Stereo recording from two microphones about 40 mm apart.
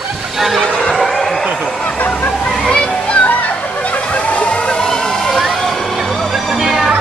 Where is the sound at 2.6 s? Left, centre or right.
Left.